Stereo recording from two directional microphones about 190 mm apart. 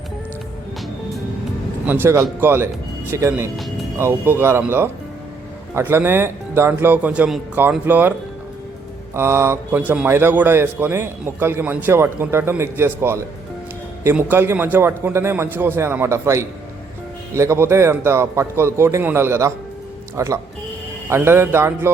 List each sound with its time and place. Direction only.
1.9 s a man's voice: 15° right (ahead or behind)
9.1 s a man's voice: 15° right (ahead or behind)